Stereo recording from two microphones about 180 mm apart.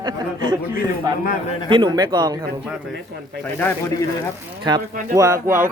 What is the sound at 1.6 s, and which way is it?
Speech, 25° right (ahead or behind).